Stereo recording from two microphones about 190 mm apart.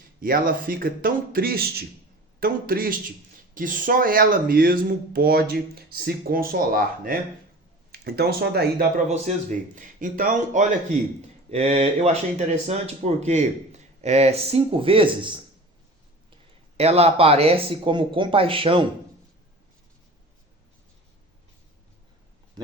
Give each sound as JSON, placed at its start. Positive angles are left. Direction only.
{"t": 0.2, "sound": "speech", "side_deg": -50}
{"t": 9.0, "sound": "speech", "side_deg": -40}
{"t": 16.7, "sound": "speech", "side_deg": -30}
{"t": 22.6, "sound": "speech", "side_deg": -25}